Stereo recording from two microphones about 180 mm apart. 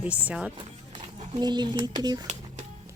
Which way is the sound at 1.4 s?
25° right (ahead or behind).